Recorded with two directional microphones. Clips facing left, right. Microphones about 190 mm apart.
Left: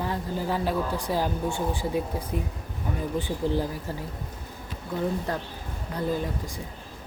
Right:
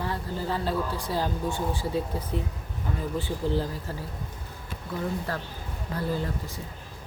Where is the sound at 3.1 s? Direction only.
15° left (ahead or behind).